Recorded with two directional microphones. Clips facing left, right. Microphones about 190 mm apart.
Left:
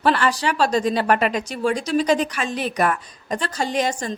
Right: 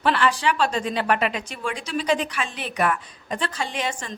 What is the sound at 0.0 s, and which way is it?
A woman's voice, 40° left (ahead or behind).